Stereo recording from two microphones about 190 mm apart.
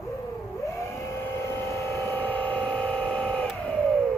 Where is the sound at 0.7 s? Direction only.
15° left (ahead or behind).